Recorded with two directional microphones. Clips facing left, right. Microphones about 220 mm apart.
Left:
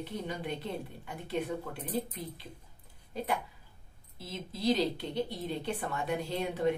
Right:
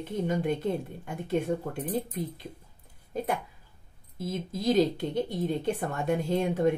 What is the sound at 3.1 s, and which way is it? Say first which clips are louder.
A woman's voice: right 4 dB; 45° right (ahead or behind).